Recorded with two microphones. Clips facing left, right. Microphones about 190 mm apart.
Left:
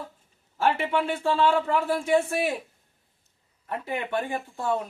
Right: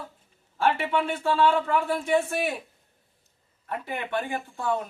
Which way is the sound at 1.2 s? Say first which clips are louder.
Right 1 dB; 20° left (ahead or behind).